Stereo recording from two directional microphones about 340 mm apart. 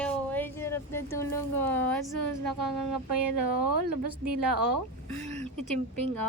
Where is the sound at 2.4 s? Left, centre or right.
Right.